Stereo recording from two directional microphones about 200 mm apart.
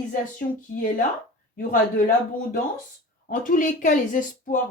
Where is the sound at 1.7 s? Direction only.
40° left (ahead or behind).